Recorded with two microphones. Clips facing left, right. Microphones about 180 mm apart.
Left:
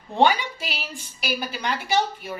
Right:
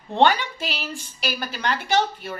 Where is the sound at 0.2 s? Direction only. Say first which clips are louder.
Right 1 dB; 10° left (ahead or behind).